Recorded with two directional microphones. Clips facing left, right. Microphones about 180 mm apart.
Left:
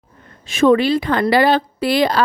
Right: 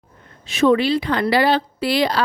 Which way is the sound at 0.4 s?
50° left (ahead or behind).